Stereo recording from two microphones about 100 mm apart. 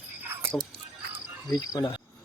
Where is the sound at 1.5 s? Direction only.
40° left (ahead or behind).